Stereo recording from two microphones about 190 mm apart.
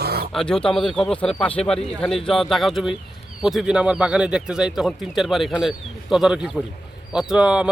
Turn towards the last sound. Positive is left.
turn(degrees=-5)  # may be behind; listen again after turning